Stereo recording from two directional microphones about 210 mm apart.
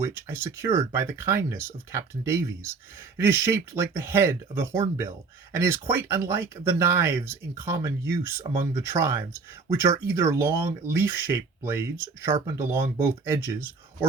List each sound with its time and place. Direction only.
0.0 s speech: 10° right (ahead or behind)